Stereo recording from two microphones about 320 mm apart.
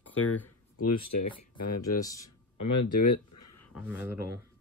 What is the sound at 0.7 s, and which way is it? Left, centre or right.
Speech, left.